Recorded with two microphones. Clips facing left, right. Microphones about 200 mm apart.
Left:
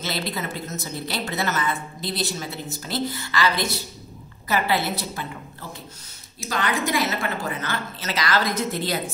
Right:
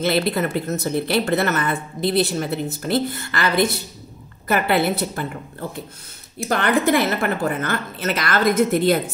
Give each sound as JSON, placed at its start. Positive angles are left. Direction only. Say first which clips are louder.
{"t": 0.0, "sound": "a woman's voice", "louder": "right 9 dB", "side_deg": -60}